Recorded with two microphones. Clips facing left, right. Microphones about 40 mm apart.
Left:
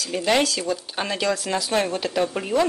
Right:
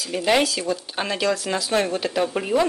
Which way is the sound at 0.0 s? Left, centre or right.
Centre.